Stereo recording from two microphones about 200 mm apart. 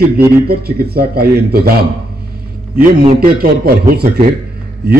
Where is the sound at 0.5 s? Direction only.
50° right (ahead or behind).